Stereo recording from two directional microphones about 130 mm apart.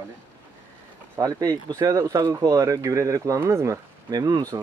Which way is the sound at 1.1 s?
30° right (ahead or behind).